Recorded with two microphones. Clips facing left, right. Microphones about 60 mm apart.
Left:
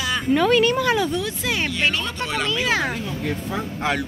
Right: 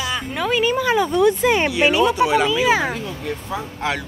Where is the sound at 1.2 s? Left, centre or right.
Right.